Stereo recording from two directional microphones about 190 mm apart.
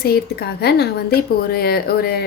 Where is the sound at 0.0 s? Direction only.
55° left (ahead or behind).